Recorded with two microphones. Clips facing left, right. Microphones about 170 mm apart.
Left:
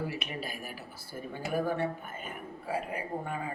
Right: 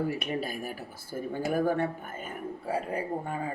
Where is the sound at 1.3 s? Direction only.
50° right (ahead or behind).